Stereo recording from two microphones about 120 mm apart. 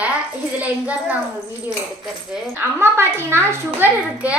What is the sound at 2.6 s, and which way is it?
A child's voice, 20° right (ahead or behind).